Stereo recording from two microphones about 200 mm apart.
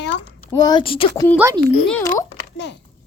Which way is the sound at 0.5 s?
20° left (ahead or behind).